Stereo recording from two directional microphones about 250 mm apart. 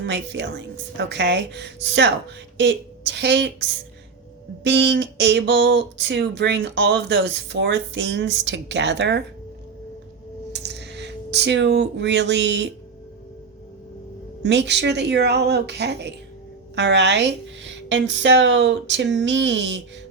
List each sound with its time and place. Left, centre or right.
0.0 s speech: right
4.6 s speech: right
10.5 s speech: right
14.4 s speech: right